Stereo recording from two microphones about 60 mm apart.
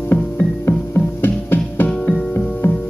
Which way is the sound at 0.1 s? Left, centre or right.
Left.